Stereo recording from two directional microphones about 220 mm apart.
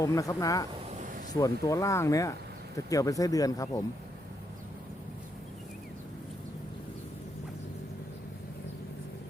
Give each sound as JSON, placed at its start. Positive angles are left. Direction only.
{"t": 0.0, "sound": "speech", "side_deg": 15}